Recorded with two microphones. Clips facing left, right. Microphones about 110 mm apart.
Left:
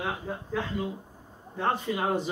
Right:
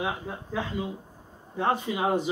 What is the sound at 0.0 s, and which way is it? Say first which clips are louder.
A man's voice: right 1 dB; 10° right (ahead or behind).